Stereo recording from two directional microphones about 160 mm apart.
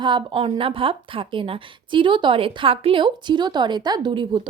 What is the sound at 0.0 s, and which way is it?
A woman's voice, 30° right (ahead or behind).